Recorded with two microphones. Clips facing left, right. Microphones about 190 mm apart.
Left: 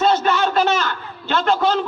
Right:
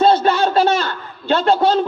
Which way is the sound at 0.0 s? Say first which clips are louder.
Right 3 dB; 30° right (ahead or behind).